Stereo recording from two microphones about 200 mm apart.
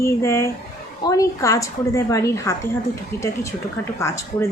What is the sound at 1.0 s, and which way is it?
Speech, 15° left (ahead or behind).